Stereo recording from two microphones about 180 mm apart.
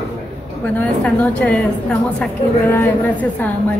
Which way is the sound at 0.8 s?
5° left (ahead or behind).